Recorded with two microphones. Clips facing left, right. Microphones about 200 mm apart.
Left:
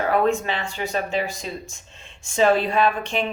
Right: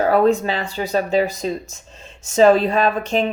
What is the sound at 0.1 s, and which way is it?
Speech, 40° right (ahead or behind).